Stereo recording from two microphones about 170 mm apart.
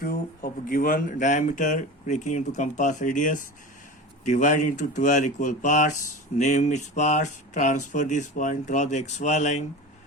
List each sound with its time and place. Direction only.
0.0 s speech: 60° left (ahead or behind); by 9.6 s 45° left (ahead or behind)